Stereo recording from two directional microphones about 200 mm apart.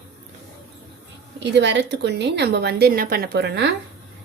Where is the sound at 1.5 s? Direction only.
60° right (ahead or behind).